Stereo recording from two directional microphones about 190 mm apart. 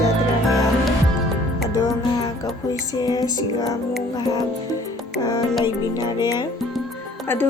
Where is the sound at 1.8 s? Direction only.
20° left (ahead or behind).